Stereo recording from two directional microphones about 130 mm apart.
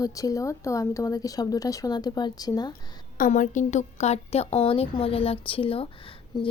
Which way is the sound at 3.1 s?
85° left.